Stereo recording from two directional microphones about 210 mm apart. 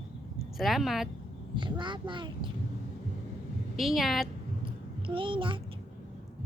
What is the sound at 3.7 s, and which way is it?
Speech, centre (ahead or behind).